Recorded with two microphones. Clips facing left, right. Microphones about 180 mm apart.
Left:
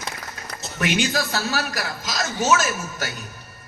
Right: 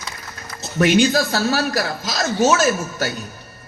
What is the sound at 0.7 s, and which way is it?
A man's voice, 35° right (ahead or behind).